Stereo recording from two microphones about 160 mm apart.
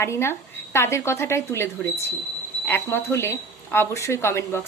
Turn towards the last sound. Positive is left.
turn(degrees=15)  # may be behind; listen again after turning